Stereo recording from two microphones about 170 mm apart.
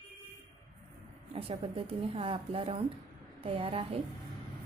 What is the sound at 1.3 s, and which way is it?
Speech, 30° right (ahead or behind).